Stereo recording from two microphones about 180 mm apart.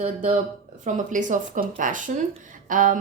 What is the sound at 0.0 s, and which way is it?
Speech, 35° right (ahead or behind).